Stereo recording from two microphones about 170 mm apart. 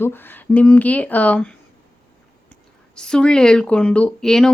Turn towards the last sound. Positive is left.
turn(degrees=5)  # may be behind; listen again after turning